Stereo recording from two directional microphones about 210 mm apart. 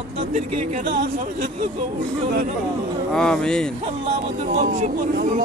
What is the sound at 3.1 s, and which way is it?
Speech, 5° left (ahead or behind).